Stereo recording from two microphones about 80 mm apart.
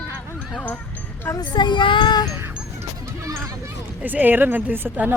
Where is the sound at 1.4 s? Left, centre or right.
Left.